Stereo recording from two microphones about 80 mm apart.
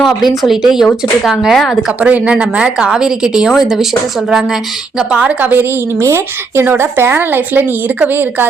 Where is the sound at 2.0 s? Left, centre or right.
Centre.